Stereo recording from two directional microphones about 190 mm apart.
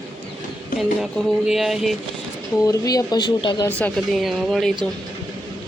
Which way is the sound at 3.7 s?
5° left (ahead or behind).